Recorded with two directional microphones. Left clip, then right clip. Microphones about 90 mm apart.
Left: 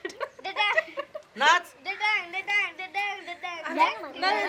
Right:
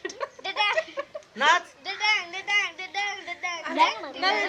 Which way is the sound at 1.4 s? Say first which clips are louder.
Even; 25° left (ahead or behind).